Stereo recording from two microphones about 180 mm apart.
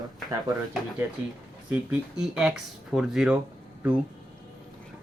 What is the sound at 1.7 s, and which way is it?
Speech, 5° right (ahead or behind).